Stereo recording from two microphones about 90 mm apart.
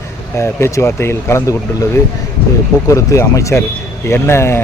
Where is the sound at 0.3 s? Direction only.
30° left (ahead or behind).